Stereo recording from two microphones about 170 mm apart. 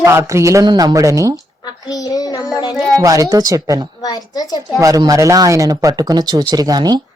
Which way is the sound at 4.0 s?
20° left (ahead or behind).